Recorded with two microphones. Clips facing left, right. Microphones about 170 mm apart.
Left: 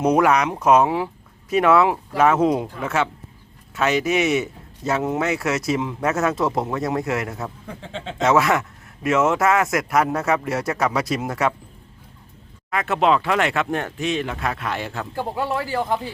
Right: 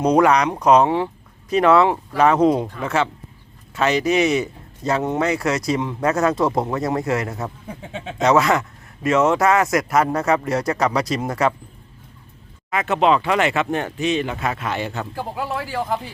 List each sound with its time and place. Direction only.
0.0 s speech: 5° left (ahead or behind)
7.4 s speech: 10° right (ahead or behind)
8.2 s speech: centre (ahead or behind)
12.7 s speech: centre (ahead or behind)
15.1 s speech: 25° left (ahead or behind)